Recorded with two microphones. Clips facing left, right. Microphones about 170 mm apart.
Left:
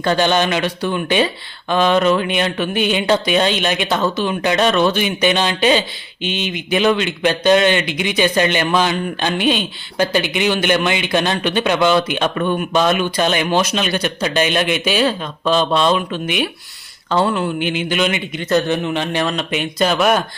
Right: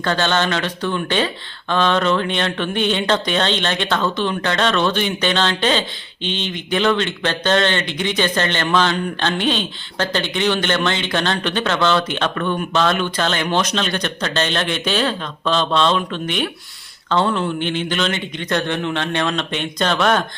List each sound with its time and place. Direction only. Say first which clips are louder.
0.0 s a man's voice: left 3 dB; 15° left (ahead or behind)